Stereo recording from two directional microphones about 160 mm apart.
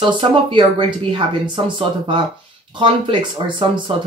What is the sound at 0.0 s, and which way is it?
Speech, 30° right (ahead or behind).